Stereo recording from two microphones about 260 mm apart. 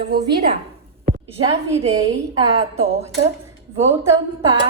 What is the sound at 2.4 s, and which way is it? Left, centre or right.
Speech, right.